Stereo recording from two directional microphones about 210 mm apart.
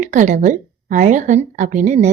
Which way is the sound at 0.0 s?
35° right (ahead or behind).